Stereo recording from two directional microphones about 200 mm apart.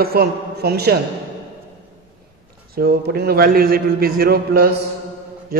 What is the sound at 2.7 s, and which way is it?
A man's voice, 50° right (ahead or behind).